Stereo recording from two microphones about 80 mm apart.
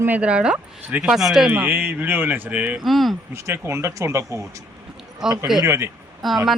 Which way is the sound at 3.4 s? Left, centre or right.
Right.